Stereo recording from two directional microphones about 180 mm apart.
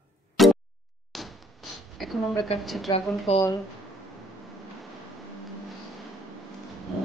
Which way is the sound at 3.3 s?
35° left (ahead or behind).